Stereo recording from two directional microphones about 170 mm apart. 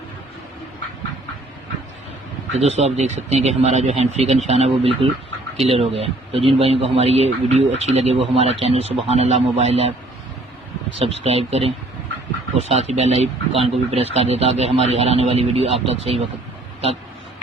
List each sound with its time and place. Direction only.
2.5 s a man's voice: 40° right (ahead or behind)
11.0 s a man's voice: 35° right (ahead or behind)